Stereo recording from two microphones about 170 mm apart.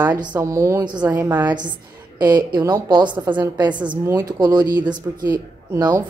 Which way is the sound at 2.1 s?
25° right (ahead or behind).